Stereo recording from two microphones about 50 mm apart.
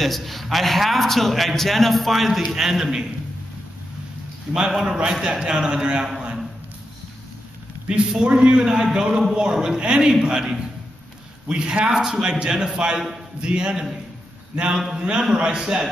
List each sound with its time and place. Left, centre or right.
0.0 s a man's voice: centre
4.6 s a man's voice: centre
7.9 s a man's voice: centre